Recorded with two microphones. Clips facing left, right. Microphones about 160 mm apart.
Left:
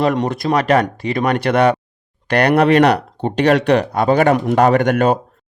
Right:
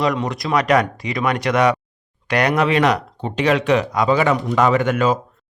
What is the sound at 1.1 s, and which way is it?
Speech, 50° left (ahead or behind).